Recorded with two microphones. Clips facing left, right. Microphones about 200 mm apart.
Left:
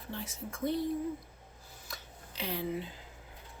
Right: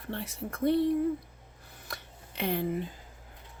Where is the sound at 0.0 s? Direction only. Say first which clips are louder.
Right 5 dB; 65° right (ahead or behind).